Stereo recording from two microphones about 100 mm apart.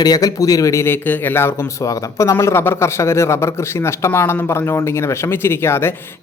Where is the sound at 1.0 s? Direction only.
20° left (ahead or behind).